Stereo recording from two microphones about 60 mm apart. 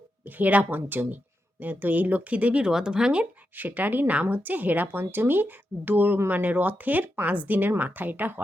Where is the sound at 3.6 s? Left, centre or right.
Right.